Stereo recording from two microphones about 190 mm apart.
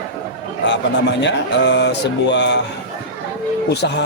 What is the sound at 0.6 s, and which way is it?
Speech, 65° left (ahead or behind).